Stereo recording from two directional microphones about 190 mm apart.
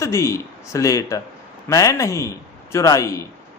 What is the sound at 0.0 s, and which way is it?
Speech, 15° left (ahead or behind).